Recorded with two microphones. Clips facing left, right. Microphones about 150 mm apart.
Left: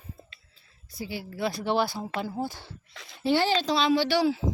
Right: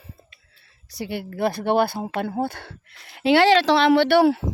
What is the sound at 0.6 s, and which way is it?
Speech, 80° right.